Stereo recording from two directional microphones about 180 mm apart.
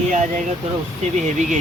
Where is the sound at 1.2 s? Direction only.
40° right (ahead or behind).